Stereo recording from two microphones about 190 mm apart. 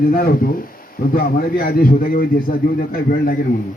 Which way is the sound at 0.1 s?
50° left (ahead or behind).